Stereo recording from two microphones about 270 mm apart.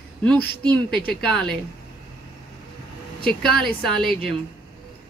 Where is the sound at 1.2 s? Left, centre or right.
Centre.